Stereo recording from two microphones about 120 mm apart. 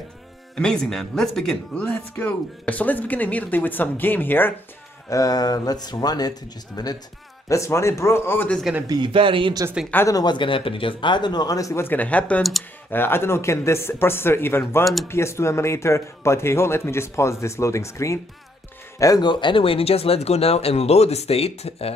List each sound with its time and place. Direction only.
0.6 s speech: 5° left (ahead or behind)
5.1 s speech: 30° left (ahead or behind)
7.4 s speech: 25° left (ahead or behind)
8.8 s speech: 35° right (ahead or behind)
10.0 s speech: 35° left (ahead or behind); by 21.9 s 55° left (ahead or behind)